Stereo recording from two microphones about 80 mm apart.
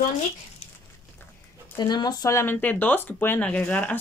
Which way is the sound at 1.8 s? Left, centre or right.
Left.